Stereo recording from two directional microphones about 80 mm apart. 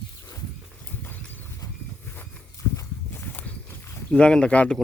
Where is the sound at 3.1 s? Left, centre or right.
Left.